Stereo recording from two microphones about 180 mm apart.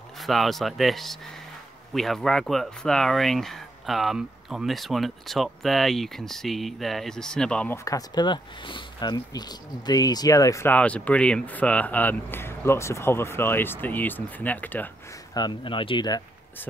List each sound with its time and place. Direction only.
0.2 s speech: centre (ahead or behind)
15.3 s speech: 25° left (ahead or behind)